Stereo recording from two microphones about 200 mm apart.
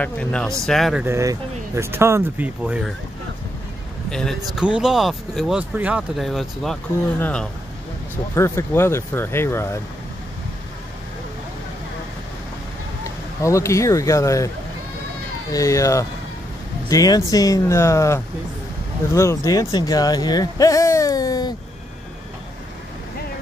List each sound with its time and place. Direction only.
0.0 s speech: 5° left (ahead or behind)
1.0 s speech: 15° right (ahead or behind)
2.6 s speech: centre (ahead or behind)
4.1 s speech: 5° left (ahead or behind)
13.0 s speech: 15° left (ahead or behind)
15.5 s speech: 15° left (ahead or behind)